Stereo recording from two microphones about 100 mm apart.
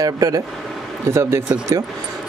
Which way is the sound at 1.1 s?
25° right (ahead or behind).